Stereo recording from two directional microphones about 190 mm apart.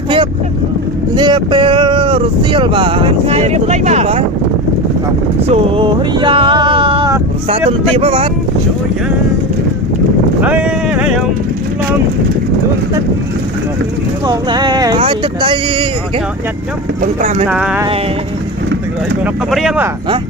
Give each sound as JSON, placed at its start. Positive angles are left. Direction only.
{"t": 1.1, "sound": "speech", "side_deg": -25}
{"t": 5.5, "sound": "speech", "side_deg": -30}
{"t": 10.4, "sound": "a sound", "side_deg": -5}
{"t": 14.3, "sound": "speech", "side_deg": -20}
{"t": 17.0, "sound": "speech", "side_deg": -45}
{"t": 17.5, "sound": "speech", "side_deg": -5}
{"t": 19.2, "sound": "speech", "side_deg": 0}